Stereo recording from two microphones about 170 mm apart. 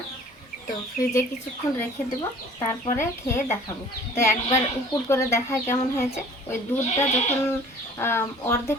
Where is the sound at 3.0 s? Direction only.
15° left (ahead or behind).